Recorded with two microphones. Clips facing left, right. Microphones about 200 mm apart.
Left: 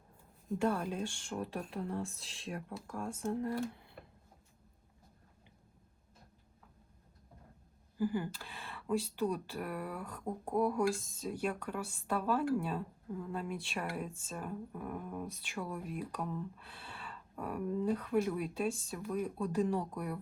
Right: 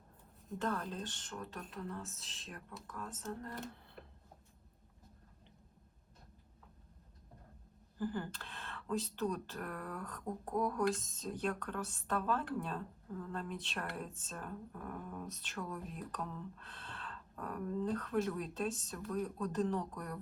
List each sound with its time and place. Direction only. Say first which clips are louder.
0.6 s speech: left 5 dB; 10° left (ahead or behind)
7.9 s speech: left 5 dB; 10° left (ahead or behind)